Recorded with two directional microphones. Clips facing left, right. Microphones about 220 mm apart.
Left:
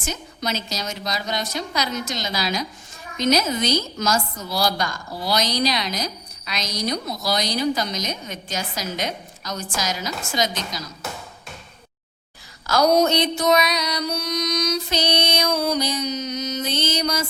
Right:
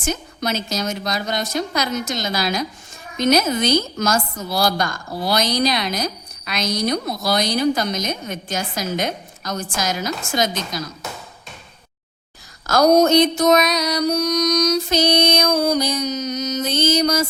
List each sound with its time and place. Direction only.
0.0 s a woman's voice: 50° right (ahead or behind)
12.6 s mantra: 45° right (ahead or behind)